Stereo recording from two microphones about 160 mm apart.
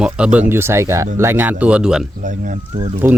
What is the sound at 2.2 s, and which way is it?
Speech, 55° right (ahead or behind).